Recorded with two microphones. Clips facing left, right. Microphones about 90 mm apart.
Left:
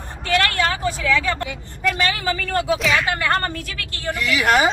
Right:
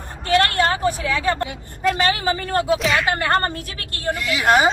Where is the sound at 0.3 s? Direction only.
30° right (ahead or behind).